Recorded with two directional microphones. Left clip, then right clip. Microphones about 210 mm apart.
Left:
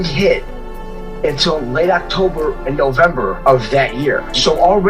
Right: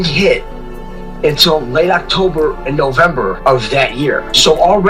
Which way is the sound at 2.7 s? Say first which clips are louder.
Right 1 dB; 45° right (ahead or behind).